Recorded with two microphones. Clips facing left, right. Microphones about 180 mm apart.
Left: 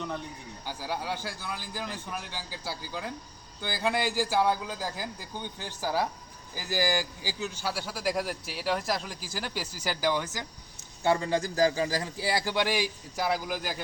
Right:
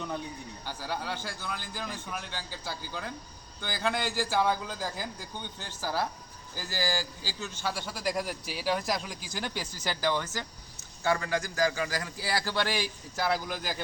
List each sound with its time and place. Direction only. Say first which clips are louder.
0.6 s a man's voice: left 2 dB; 10° left (ahead or behind)
11.0 s a man's voice: left 3 dB; 25° left (ahead or behind); by 13.8 s 5° left (ahead or behind)